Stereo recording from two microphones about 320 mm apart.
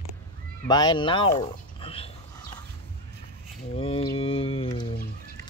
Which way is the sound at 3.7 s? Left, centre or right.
Centre.